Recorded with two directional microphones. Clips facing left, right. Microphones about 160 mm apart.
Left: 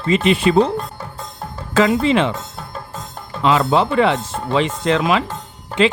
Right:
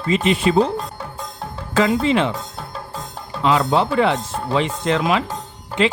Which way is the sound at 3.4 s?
90° left.